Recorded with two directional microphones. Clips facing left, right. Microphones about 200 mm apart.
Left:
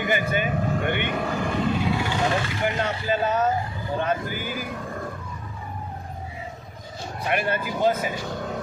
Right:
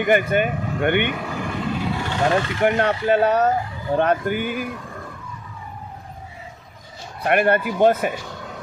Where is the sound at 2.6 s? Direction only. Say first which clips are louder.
Right 9 dB; 65° right (ahead or behind).